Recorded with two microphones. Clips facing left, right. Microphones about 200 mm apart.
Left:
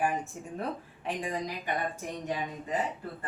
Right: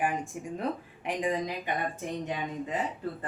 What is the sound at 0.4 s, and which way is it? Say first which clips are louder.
Speech: right 4 dB; 15° right (ahead or behind).